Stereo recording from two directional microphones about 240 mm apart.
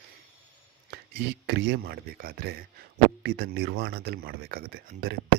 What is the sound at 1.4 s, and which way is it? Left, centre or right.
Speech, right.